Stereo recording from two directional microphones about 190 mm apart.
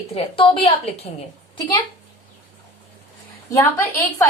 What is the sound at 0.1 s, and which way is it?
A woman's voice, 30° left (ahead or behind).